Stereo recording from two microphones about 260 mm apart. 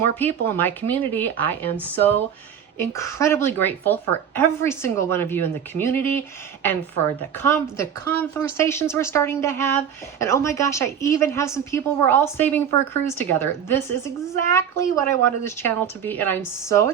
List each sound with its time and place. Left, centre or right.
0.2 s speech: centre